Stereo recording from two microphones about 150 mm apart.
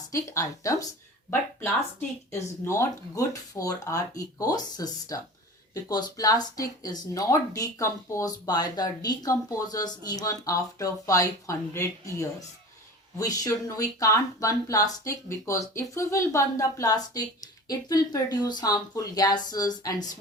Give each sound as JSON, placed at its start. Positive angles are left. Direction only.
{"t": 0.1, "sound": "speech", "side_deg": 20}